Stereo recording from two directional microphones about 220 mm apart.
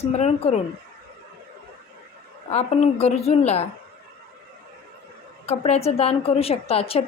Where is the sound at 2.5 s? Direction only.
30° left (ahead or behind).